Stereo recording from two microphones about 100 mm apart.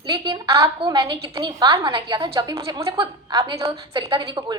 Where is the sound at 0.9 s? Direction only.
40° right (ahead or behind).